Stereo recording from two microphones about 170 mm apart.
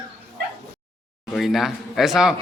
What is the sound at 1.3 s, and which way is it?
A man's voice, centre (ahead or behind).